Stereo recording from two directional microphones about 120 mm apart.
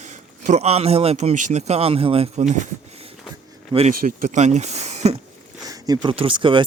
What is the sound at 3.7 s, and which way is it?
Speech, 70° right (ahead or behind).